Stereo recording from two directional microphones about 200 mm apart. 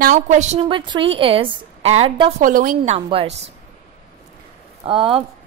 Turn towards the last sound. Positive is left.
turn(degrees=-25)  # may be behind; listen again after turning